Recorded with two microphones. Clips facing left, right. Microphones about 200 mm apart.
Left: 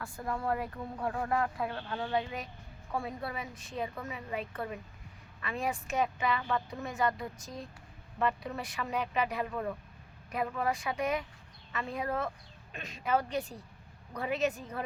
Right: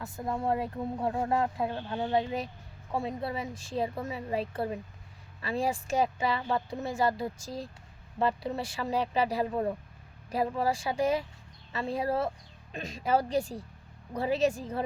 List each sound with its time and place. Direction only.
0.0 s a woman's voice: 20° right (ahead or behind)